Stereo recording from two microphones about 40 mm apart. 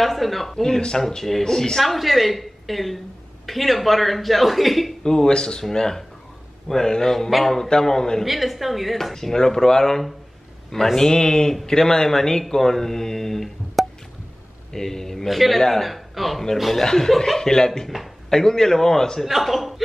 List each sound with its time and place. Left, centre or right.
0.0 s speech: centre
0.7 s speech: centre
1.0 s a man's voice: centre
5.0 s a man's voice: centre
7.2 s a man's voice: centre
8.3 s a man's voice: centre
16.8 s a man's voice: centre
19.2 s speech: centre